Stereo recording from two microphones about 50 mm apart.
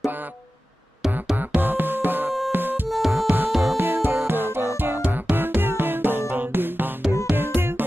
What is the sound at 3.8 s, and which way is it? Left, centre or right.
Music, right.